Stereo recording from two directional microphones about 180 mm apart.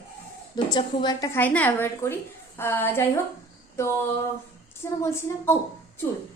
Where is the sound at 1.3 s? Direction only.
10° left (ahead or behind).